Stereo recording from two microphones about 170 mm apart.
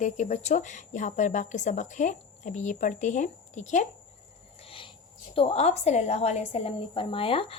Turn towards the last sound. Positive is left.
turn(degrees=35)  # may be behind; listen again after turning